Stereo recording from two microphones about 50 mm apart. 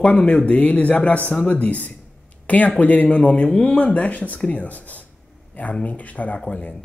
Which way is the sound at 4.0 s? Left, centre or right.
Left.